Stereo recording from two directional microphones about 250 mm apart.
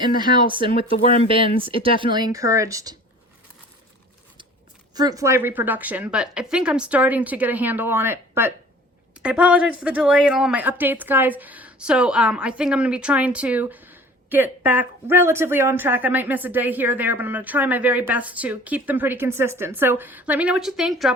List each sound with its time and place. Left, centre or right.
0.2 s speech: centre
4.9 s speech: centre